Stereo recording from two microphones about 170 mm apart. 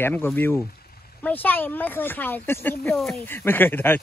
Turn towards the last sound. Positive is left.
turn(degrees=10)  # may be behind; listen again after turning